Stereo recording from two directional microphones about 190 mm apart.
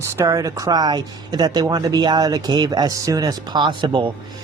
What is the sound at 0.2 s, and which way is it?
Speech, 15° right (ahead or behind).